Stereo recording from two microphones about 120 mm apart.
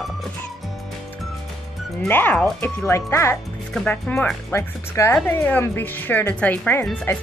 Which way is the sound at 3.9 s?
10° left (ahead or behind).